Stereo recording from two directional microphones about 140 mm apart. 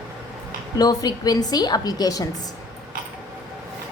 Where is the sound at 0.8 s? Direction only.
25° left (ahead or behind).